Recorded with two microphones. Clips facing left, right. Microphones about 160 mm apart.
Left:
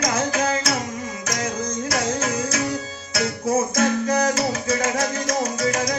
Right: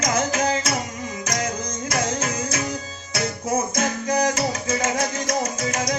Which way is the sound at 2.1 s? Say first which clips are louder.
Left 2 dB; 20° right (ahead or behind).